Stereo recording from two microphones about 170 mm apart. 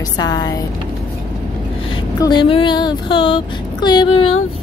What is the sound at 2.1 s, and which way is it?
Speech, 25° left (ahead or behind).